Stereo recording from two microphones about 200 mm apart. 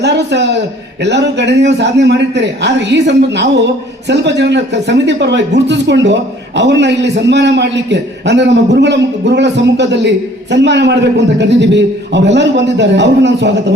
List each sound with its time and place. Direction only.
0.0 s a man's voice: 60° right (ahead or behind)